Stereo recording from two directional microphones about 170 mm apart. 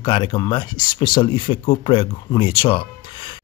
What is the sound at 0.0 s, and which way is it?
Speech, 30° left (ahead or behind).